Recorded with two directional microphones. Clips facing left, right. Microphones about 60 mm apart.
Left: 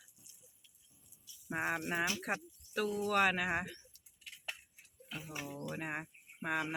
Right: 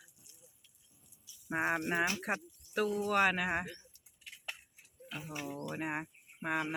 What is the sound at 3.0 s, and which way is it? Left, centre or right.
Speech, centre.